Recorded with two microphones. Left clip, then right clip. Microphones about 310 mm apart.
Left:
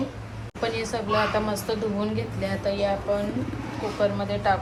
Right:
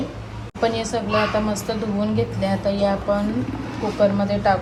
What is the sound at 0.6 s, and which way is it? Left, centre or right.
A woman's voice, centre.